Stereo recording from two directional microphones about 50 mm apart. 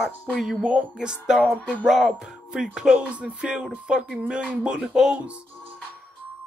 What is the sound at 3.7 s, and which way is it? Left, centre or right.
Speech, centre.